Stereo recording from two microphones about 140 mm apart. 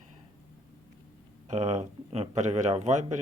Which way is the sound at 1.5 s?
55° right (ahead or behind).